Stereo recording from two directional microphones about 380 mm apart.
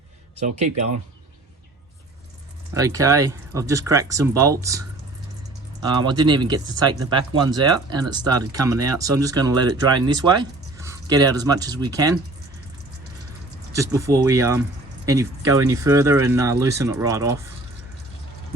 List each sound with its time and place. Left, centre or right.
2.7 s speech: centre
13.7 s speech: centre